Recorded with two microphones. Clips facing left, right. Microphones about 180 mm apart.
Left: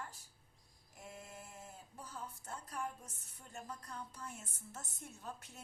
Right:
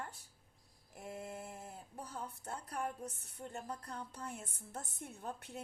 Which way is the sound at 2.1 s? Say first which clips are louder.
Right 3 dB; 60° right (ahead or behind).